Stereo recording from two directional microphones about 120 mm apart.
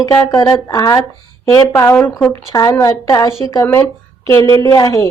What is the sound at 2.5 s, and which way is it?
A woman's voice, 25° left (ahead or behind).